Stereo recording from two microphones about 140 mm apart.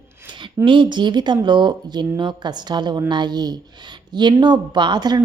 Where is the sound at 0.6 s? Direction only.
35° right (ahead or behind).